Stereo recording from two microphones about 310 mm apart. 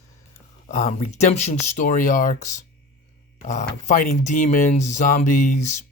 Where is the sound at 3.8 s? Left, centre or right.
Left.